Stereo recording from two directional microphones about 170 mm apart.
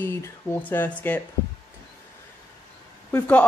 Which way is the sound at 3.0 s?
10° left (ahead or behind).